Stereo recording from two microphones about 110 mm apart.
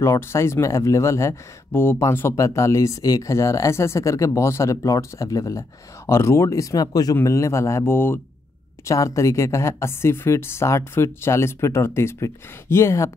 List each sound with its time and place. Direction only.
0.0 s speech: 25° left (ahead or behind)